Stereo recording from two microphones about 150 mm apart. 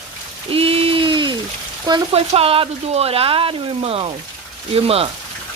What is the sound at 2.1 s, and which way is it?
Speech, 40° right (ahead or behind).